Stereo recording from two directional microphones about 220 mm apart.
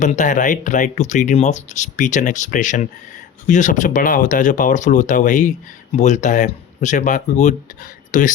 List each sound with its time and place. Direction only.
0.0 s speech: 35° left (ahead or behind)